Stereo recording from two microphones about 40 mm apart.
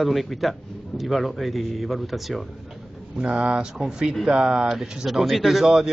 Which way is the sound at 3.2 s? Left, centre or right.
Right.